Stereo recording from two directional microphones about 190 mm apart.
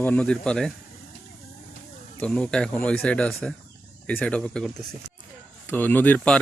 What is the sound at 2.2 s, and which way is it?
Speech, 5° left (ahead or behind).